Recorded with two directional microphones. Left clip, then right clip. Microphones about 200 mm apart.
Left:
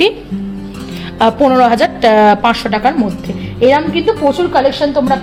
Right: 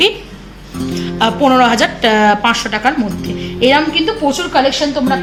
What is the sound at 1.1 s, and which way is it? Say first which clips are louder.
A woman's voice: left 2 dB; 55° left (ahead or behind).